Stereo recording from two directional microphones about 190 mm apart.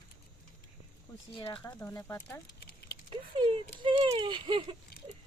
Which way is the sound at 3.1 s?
25° right (ahead or behind).